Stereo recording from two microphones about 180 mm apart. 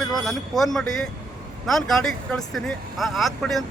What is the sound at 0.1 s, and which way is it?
Speech, centre (ahead or behind).